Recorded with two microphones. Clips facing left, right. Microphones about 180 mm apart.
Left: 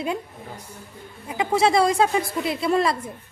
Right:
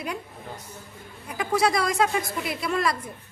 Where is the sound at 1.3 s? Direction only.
25° left (ahead or behind).